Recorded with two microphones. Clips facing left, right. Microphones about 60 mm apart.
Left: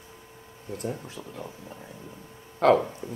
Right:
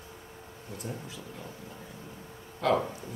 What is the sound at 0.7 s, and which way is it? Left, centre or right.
Speech, left.